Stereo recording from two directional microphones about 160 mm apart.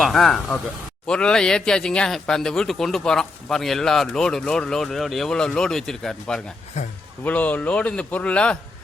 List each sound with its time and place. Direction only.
0.0 s speech: centre (ahead or behind)
6.8 s a man's voice: 45° left (ahead or behind)
7.3 s a man's voice: 10° left (ahead or behind)